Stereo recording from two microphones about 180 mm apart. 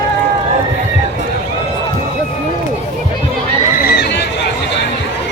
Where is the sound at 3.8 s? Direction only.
60° left (ahead or behind).